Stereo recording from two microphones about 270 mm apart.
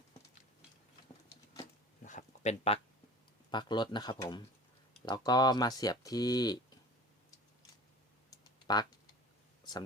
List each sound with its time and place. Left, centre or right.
2.0 s a sound: left
3.5 s speech: centre
8.6 s speech: centre